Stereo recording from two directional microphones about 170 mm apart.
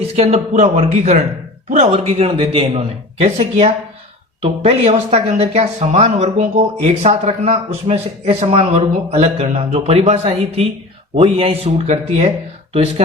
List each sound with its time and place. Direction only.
0.2 s speech: 40° right (ahead or behind)